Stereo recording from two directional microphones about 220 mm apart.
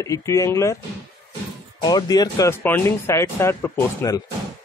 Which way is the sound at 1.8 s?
20° left (ahead or behind).